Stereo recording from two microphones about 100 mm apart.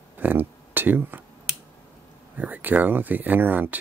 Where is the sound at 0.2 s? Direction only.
20° right (ahead or behind).